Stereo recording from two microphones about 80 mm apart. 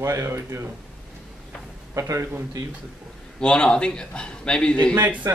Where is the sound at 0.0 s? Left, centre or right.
Right.